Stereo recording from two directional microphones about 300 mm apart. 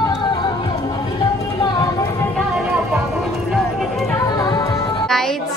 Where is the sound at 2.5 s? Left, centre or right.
Centre.